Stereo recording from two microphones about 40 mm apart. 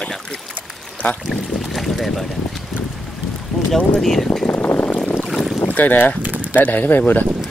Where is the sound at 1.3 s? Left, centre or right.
Centre.